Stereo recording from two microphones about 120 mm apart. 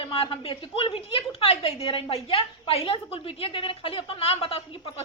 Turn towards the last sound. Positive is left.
turn(degrees=55)  # may be behind; listen again after turning